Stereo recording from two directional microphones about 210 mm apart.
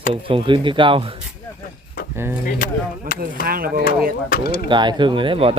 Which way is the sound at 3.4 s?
45° right (ahead or behind).